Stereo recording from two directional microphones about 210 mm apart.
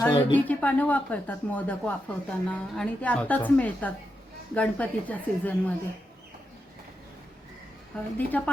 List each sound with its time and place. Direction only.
0.0 s speech: 20° left (ahead or behind)
0.3 s speech: 5° left (ahead or behind)
7.9 s speech: 5° left (ahead or behind)